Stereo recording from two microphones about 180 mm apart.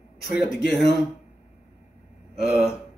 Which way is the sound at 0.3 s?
5° right (ahead or behind).